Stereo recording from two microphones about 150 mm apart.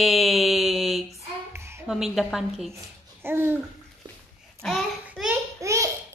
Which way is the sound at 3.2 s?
15° right (ahead or behind).